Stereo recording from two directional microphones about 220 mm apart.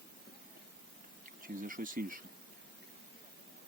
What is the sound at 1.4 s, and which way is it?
Speech, 40° right (ahead or behind).